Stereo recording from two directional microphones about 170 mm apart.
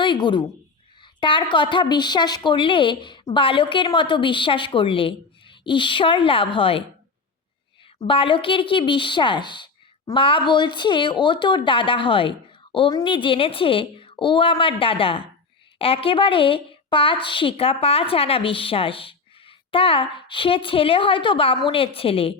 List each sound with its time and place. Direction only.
0.0 s a woman's voice: 25° left (ahead or behind)
7.9 s a woman's voice: 30° left (ahead or behind)